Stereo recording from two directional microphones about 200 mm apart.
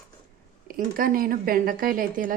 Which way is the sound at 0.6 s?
45° right (ahead or behind).